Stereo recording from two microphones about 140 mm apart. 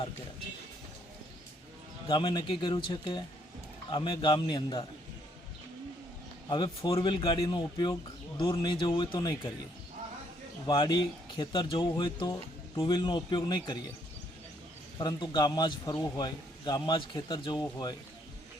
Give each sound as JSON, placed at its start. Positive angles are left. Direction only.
{"t": 2.0, "sound": "speech", "side_deg": 30}
{"t": 6.5, "sound": "speech", "side_deg": 35}
{"t": 10.7, "sound": "speech", "side_deg": 35}
{"t": 14.9, "sound": "speech", "side_deg": 30}